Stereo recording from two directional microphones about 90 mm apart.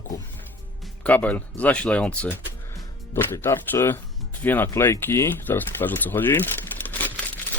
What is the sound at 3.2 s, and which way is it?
Speech, 25° left (ahead or behind).